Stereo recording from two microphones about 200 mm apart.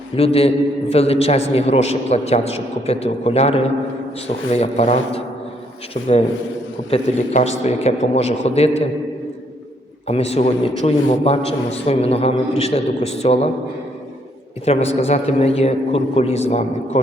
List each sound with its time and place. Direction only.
0.2 s a man's voice: 30° left (ahead or behind)
10.1 s a man's voice: 30° left (ahead or behind)
14.6 s a man's voice: 30° left (ahead or behind)